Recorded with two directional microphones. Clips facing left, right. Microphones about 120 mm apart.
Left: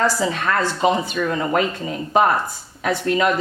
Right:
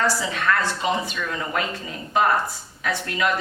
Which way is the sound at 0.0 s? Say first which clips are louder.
Left 3 dB; 35° left (ahead or behind).